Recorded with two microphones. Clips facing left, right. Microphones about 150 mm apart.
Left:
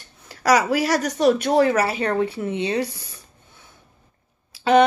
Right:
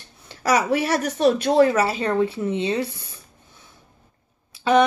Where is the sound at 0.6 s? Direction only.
25° right (ahead or behind).